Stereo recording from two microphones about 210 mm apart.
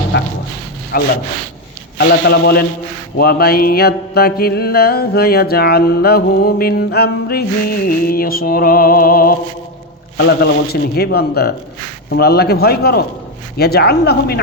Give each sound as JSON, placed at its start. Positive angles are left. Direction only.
{"t": 0.1, "sound": "dog", "side_deg": 55}
{"t": 0.9, "sound": "mantra", "side_deg": 45}